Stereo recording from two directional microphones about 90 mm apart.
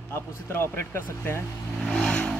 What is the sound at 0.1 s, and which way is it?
Speech, 25° left (ahead or behind).